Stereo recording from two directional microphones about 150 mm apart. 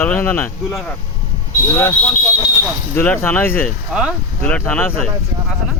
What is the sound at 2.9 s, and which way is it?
Speech, 15° left (ahead or behind).